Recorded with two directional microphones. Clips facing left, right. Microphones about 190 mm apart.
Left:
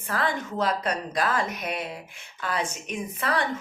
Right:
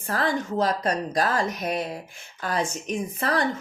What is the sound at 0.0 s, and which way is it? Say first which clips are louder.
Speech: right 2 dB; 40° right (ahead or behind).